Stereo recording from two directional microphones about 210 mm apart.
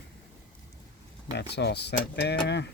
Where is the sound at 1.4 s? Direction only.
55° left (ahead or behind).